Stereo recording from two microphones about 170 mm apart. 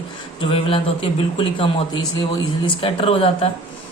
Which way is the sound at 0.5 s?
30° left (ahead or behind).